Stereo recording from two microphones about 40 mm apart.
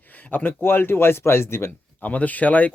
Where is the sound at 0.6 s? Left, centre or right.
Left.